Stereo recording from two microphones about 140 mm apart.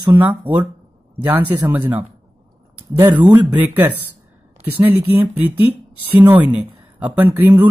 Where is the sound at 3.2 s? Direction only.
10° right (ahead or behind).